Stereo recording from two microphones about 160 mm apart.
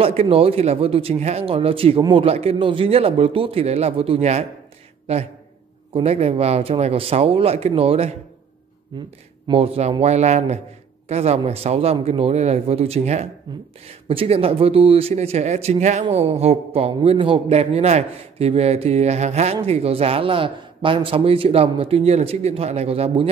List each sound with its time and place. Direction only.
0.0 s a man's voice: 40° right (ahead or behind)
8.9 s speech: 25° right (ahead or behind)
9.5 s speech: 40° right (ahead or behind)